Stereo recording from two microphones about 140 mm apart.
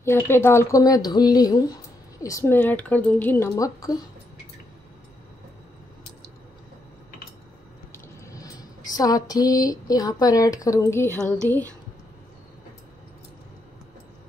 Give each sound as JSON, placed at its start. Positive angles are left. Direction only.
{"t": 0.0, "sound": "a woman's voice", "side_deg": 15}
{"t": 8.3, "sound": "a sound", "side_deg": 25}
{"t": 11.4, "sound": "speech", "side_deg": 15}